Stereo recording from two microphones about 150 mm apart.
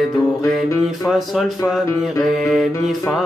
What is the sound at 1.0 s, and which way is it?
Mantra, centre (ahead or behind).